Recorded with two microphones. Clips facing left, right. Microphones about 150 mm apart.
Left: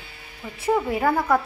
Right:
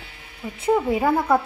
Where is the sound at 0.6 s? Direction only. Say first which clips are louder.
Right 2 dB; 15° right (ahead or behind).